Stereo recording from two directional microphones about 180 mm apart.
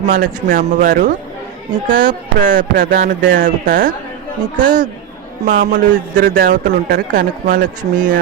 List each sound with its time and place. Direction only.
0.1 s a man's voice: 50° right (ahead or behind)